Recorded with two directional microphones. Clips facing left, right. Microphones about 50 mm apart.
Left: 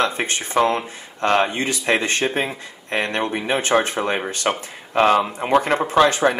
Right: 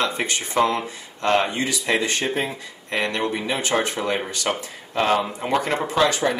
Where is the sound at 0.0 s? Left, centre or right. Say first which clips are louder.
Left 2 dB; left.